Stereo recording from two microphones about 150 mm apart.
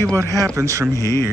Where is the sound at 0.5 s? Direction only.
20° right (ahead or behind).